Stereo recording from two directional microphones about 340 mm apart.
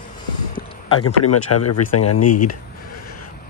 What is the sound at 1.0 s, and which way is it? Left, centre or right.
Speech, left.